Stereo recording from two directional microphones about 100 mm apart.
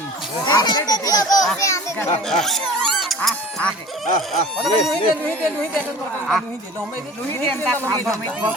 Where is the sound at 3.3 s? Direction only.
10° left (ahead or behind).